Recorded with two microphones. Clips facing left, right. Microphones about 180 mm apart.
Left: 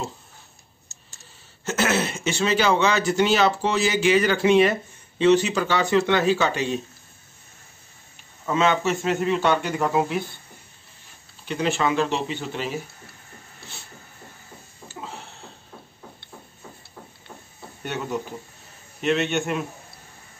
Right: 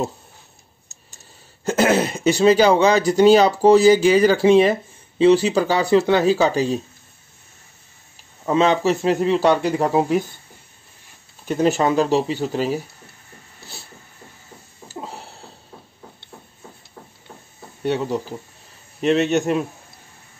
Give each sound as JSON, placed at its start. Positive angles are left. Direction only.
{"t": 1.1, "sound": "a sound", "side_deg": -15}
{"t": 1.8, "sound": "speech", "side_deg": -35}
{"t": 8.5, "sound": "speech", "side_deg": -35}
{"t": 11.4, "sound": "speech", "side_deg": -40}
{"t": 14.9, "sound": "a sound", "side_deg": -35}
{"t": 17.8, "sound": "speech", "side_deg": -30}